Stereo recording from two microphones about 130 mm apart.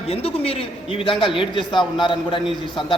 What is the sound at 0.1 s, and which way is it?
A man's voice, 50° left (ahead or behind).